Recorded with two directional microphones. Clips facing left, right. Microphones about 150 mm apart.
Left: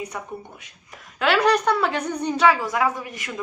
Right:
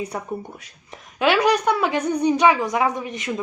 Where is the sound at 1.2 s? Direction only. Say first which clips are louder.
Right 1 dB; 15° right (ahead or behind).